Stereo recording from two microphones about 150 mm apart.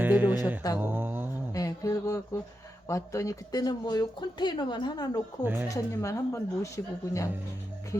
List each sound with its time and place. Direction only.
0.0 s music: 10° right (ahead or behind)
0.8 s mantra: 15° right (ahead or behind)
1.5 s a sound: 25° left (ahead or behind)
2.8 s speech: 20° left (ahead or behind)
5.4 s mantra: 15° right (ahead or behind)
5.6 s speech: 20° left (ahead or behind)